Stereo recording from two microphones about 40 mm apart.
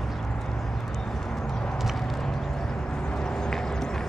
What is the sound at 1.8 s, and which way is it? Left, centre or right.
Clip-clop, centre.